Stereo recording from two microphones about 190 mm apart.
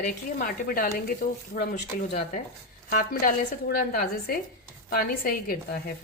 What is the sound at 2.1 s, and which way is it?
A woman's voice, 40° left (ahead or behind).